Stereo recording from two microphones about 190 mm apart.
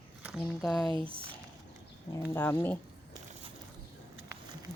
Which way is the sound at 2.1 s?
15° left (ahead or behind).